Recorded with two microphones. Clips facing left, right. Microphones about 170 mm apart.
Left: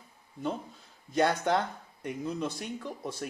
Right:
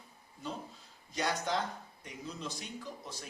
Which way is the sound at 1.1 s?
55° left (ahead or behind).